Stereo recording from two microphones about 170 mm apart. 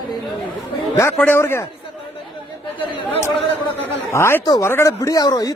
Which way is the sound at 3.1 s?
15° left (ahead or behind).